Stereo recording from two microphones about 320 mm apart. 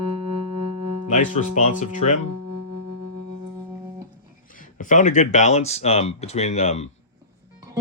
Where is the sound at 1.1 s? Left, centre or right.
Left.